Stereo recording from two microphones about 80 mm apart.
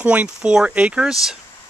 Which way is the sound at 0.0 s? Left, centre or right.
Centre.